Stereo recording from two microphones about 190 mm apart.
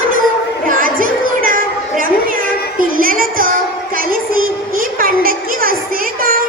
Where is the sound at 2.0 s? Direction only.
45° right (ahead or behind).